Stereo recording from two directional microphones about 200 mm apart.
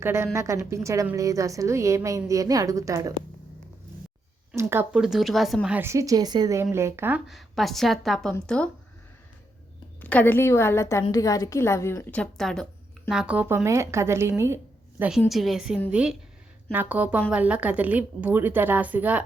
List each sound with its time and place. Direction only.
0.0 s a woman's voice: 15° right (ahead or behind)
4.5 s speech: 10° right (ahead or behind); by 8.7 s 5° left (ahead or behind)
10.0 s a woman's voice: 10° left (ahead or behind); by 19.2 s 10° right (ahead or behind)